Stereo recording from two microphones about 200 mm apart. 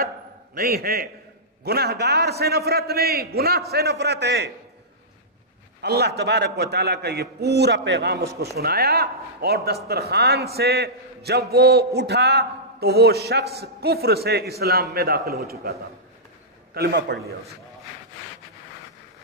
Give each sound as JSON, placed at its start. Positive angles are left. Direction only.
{"t": 0.6, "sound": "a man's voice", "side_deg": -50}
{"t": 5.8, "sound": "a man's voice", "side_deg": -55}